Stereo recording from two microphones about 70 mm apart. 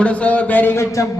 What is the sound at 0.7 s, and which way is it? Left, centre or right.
Speech, left.